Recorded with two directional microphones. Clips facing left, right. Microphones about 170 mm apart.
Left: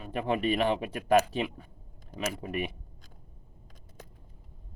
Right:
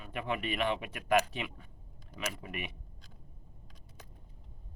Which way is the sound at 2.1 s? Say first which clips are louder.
Left 6 dB; 45° left (ahead or behind).